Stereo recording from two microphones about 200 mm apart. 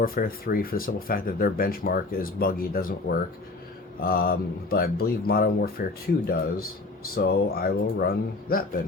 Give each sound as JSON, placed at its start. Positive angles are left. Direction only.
{"t": 0.0, "sound": "speech", "side_deg": 45}
{"t": 7.2, "sound": "speech", "side_deg": 50}